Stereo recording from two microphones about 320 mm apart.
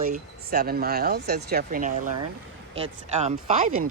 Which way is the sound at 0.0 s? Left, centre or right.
Right.